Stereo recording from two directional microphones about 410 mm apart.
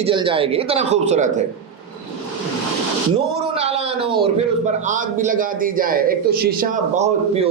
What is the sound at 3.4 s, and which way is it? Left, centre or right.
A man's voice, centre.